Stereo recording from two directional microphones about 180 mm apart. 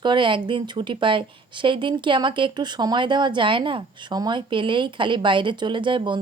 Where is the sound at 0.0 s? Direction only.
25° right (ahead or behind).